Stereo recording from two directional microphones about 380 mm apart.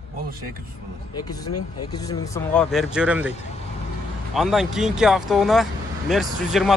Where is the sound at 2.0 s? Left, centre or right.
Centre.